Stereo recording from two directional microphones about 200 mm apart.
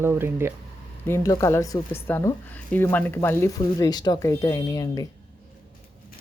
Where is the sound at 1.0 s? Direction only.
15° left (ahead or behind).